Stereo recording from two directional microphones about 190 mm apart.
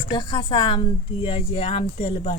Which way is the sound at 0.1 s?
25° left (ahead or behind).